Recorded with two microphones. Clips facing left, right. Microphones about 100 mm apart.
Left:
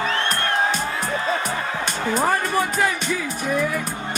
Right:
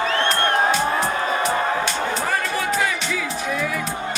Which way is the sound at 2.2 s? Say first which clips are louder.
Left 3 dB; 45° left (ahead or behind).